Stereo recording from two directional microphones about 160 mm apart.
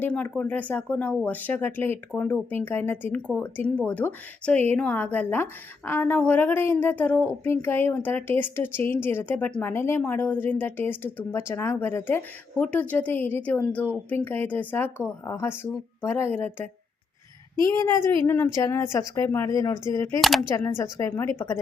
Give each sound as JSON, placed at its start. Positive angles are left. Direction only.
{"t": 0.0, "sound": "speech", "side_deg": 10}
{"t": 17.7, "sound": "speech", "side_deg": 20}
{"t": 20.2, "sound": "speech", "side_deg": 0}
{"t": 20.5, "sound": "speech", "side_deg": 15}